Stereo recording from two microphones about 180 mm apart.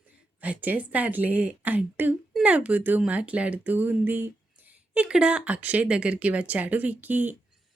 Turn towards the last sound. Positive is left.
turn(degrees=-10)  # may be behind; listen again after turning